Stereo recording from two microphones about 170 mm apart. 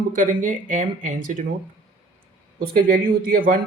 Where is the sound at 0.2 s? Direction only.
50° right (ahead or behind).